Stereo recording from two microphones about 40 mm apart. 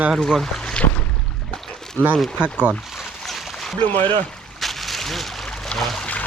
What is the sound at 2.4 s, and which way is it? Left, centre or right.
Speech, right.